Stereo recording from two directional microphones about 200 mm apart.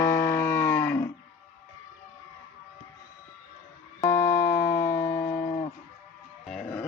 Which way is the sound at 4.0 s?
15° left (ahead or behind).